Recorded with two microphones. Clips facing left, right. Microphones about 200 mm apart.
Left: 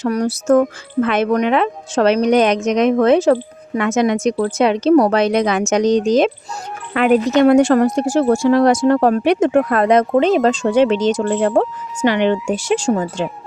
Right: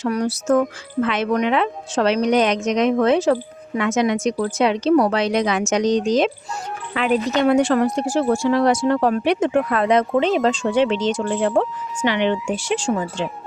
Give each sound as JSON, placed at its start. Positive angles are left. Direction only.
{"t": 0.0, "sound": "a woman's voice", "side_deg": 40}